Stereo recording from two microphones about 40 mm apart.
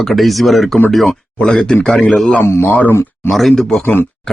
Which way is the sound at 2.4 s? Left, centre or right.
Left.